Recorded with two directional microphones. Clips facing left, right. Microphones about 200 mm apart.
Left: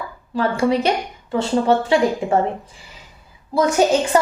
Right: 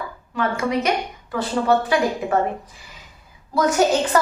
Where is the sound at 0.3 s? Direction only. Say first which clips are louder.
Left 4 dB; 30° left (ahead or behind).